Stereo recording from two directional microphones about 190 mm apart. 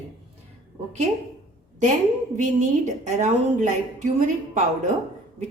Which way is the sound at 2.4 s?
40° right (ahead or behind).